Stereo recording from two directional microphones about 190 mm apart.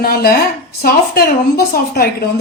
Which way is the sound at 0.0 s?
55° left (ahead or behind).